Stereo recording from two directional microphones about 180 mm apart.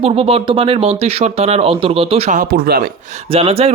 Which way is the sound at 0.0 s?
35° right (ahead or behind).